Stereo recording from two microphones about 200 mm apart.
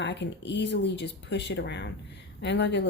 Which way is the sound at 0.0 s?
60° left (ahead or behind).